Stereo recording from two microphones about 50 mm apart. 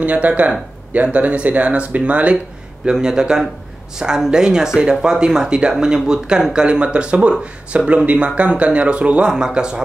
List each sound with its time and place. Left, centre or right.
0.0 s speech: right
2.9 s speech: centre